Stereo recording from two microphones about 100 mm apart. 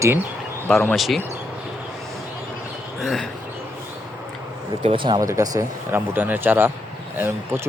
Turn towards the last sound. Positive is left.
turn(degrees=-25)  # may be behind; listen again after turning